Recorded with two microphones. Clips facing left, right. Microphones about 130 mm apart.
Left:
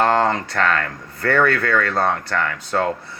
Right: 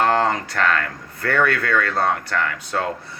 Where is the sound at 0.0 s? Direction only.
30° left (ahead or behind).